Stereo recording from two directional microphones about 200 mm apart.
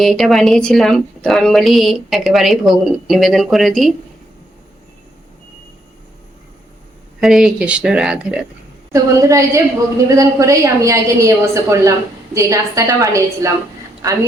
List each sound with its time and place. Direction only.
0.0 s a woman's voice: centre (ahead or behind)
7.2 s a woman's voice: centre (ahead or behind)
8.9 s a woman's voice: 15° right (ahead or behind)